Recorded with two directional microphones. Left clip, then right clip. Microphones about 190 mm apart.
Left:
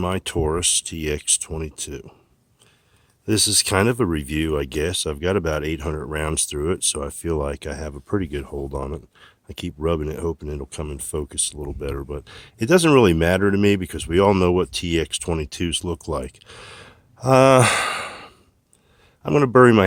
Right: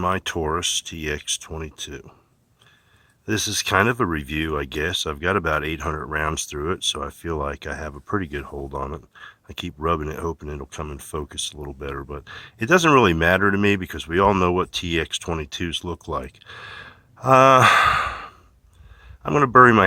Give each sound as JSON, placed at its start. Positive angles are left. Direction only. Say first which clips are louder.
{"t": 0.0, "sound": "speech", "louder": "right 1 dB", "side_deg": 35}
{"t": 3.2, "sound": "speech", "louder": "left 3 dB", "side_deg": 40}